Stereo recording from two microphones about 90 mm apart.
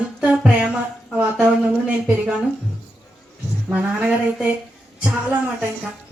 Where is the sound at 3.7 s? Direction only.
10° right (ahead or behind).